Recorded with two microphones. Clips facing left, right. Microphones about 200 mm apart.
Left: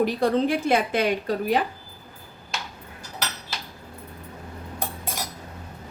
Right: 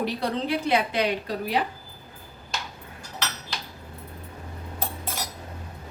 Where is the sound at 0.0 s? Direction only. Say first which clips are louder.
Left 6 dB; 50° left (ahead or behind).